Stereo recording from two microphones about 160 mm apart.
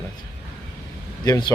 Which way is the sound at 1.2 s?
20° left (ahead or behind).